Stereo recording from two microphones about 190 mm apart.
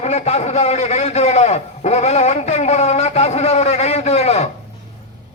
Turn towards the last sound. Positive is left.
turn(degrees=35)  # may be behind; listen again after turning